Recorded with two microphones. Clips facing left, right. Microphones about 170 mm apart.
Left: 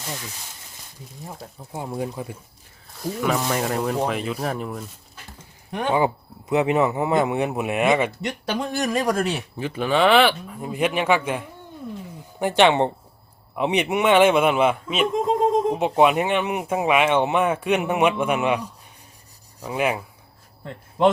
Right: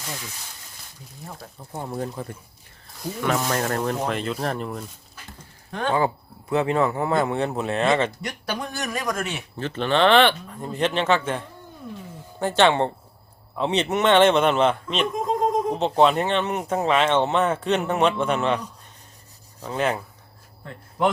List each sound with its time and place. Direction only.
1.7 s speech: 5° left (ahead or behind)
3.2 s speech: centre (ahead or behind)
5.7 s speech: 15° left (ahead or behind)
8.2 s speech: 25° left (ahead or behind)
9.6 s speech: 10° left (ahead or behind)
19.6 s speech: 10° left (ahead or behind)
21.0 s speech: 25° left (ahead or behind)